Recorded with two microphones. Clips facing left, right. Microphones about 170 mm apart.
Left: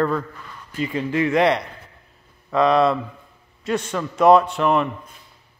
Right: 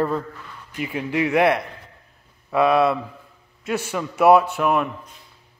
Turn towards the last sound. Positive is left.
turn(degrees=-5)  # may be behind; listen again after turning